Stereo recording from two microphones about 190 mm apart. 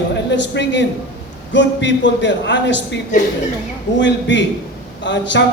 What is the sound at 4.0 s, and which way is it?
A man's voice, 70° left (ahead or behind).